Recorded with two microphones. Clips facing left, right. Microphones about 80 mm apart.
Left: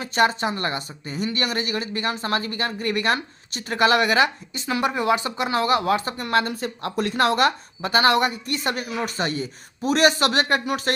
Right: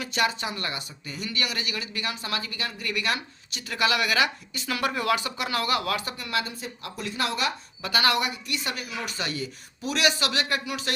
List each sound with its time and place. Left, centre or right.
0.0 s speech: left
6.2 s a woman's voice: left
7.8 s speech: left